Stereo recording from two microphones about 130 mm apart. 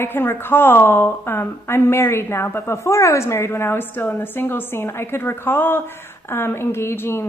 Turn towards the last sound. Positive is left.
turn(degrees=15)  # may be behind; listen again after turning